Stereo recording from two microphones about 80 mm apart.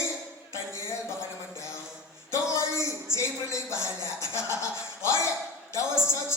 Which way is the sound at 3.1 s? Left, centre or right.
Left.